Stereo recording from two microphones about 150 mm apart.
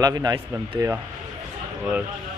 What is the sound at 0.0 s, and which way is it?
Speech, 25° right (ahead or behind).